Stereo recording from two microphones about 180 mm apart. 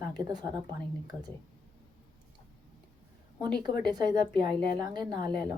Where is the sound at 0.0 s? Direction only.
20° right (ahead or behind).